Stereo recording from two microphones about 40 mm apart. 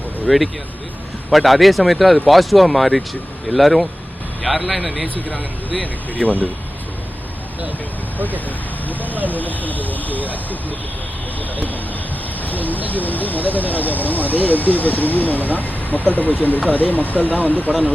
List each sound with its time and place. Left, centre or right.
0.3 s speech: centre
6.2 s speech: left
9.1 s speech: right
9.4 s speech: left
12.5 s a sound: left
12.9 s speech: left